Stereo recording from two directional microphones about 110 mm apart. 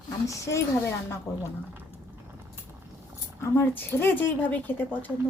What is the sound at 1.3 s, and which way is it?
Speech, 25° left (ahead or behind).